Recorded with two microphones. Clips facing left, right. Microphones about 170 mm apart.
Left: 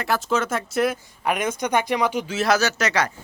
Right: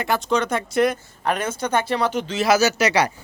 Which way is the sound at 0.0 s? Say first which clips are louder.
Right 2 dB; centre (ahead or behind).